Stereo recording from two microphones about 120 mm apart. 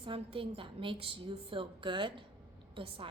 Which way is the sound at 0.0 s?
50° right (ahead or behind).